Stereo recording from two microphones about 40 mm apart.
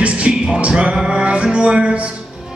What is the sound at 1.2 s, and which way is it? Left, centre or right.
Music, right.